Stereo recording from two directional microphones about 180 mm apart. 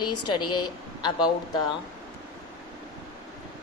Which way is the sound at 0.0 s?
25° left (ahead or behind).